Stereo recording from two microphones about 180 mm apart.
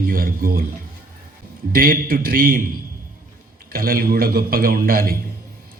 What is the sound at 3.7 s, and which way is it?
A man's voice, 55° right (ahead or behind).